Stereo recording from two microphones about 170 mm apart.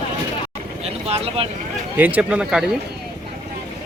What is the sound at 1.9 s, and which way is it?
Speech, 10° right (ahead or behind).